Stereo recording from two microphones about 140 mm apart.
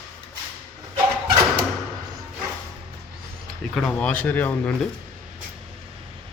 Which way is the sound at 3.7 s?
10° left (ahead or behind).